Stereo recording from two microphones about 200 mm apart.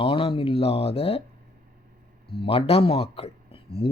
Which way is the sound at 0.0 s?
25° left (ahead or behind).